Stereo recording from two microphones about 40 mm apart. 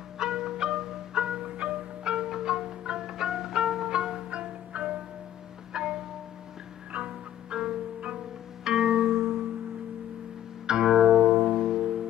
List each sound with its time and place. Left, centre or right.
0.2 s music: centre
6.9 s music: right
7.5 s music: right
9.1 s music: right
10.7 s music: centre